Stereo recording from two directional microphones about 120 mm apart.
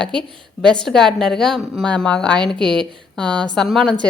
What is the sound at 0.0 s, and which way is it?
A woman's voice, 5° left (ahead or behind).